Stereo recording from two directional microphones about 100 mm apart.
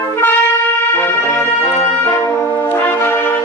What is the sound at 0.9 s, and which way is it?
Music, 25° left (ahead or behind).